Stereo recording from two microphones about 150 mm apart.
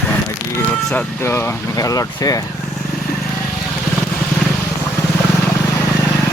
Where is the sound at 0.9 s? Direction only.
15° left (ahead or behind).